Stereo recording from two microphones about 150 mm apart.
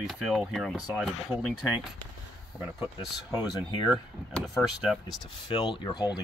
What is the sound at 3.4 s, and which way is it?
Speech, 5° right (ahead or behind).